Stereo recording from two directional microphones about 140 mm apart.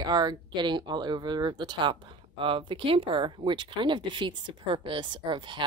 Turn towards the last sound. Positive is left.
turn(degrees=-35)  # may be behind; listen again after turning